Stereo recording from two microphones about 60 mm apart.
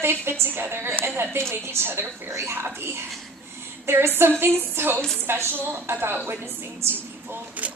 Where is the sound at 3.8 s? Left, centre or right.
Right.